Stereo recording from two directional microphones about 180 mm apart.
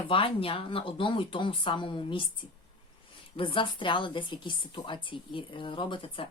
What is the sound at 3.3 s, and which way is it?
A woman's voice, 30° left (ahead or behind).